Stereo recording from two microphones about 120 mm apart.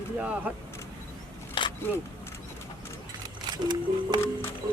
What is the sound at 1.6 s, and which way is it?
Single-lens reflex camera, 45° left (ahead or behind).